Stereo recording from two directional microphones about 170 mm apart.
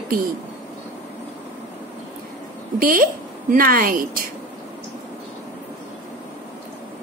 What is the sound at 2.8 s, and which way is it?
A woman's voice, 55° right (ahead or behind).